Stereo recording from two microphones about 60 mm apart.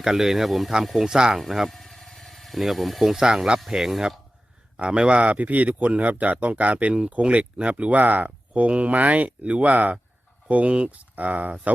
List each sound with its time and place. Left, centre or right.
0.0 s speech: centre
1.8 s a sound: centre
3.6 s speech: centre
4.8 s speech: centre